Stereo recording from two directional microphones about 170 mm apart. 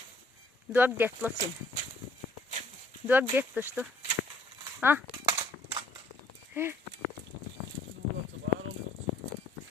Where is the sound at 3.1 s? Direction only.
10° right (ahead or behind).